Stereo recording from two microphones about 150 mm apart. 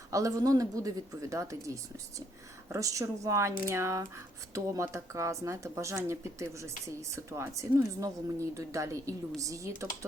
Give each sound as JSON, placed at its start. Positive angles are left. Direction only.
{"t": 0.1, "sound": "a woman's voice", "side_deg": -25}